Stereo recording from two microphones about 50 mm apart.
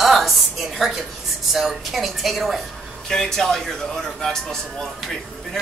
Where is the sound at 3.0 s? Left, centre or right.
Centre.